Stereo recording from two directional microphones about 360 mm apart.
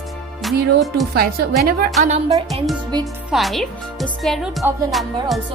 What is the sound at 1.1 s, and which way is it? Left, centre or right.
A woman's voice, right.